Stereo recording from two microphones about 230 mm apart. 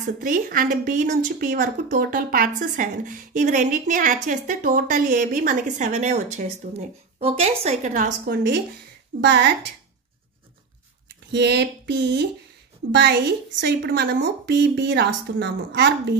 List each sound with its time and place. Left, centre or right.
0.2 s a woman's voice: right
11.3 s a woman's voice: right